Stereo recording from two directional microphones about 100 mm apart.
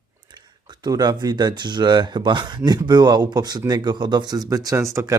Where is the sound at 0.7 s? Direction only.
40° right (ahead or behind).